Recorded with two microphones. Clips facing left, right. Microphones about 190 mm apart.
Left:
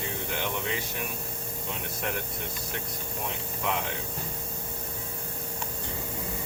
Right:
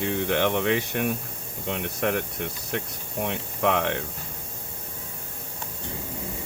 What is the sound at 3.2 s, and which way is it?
Speech, 75° right (ahead or behind).